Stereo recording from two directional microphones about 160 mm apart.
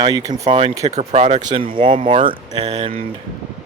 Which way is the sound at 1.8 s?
30° right (ahead or behind).